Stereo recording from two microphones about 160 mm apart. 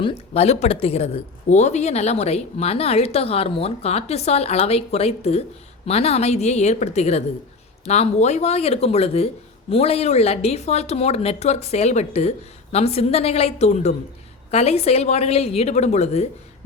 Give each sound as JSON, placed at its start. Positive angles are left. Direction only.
{"t": 0.0, "sound": "speech", "side_deg": 40}